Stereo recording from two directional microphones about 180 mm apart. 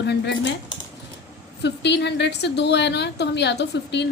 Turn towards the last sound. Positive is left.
turn(degrees=75)  # may be behind; listen again after turning